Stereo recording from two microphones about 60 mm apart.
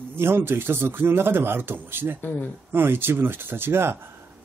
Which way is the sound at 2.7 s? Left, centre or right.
Right.